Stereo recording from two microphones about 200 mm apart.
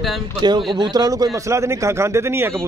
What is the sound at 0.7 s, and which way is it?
A man's voice, 20° right (ahead or behind).